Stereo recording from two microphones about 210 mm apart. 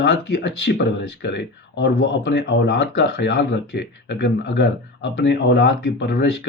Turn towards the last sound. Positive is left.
turn(degrees=55)  # may be behind; listen again after turning